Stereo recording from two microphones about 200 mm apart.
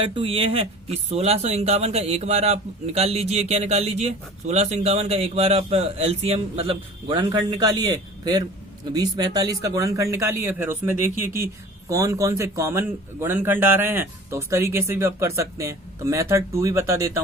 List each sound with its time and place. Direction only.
0.0 s a man's voice: 25° right (ahead or behind)